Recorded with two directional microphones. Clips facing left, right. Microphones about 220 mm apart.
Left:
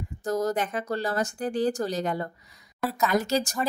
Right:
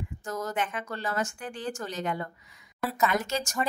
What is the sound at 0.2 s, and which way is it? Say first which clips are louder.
A woman's voice: left 6 dB; 35° left (ahead or behind).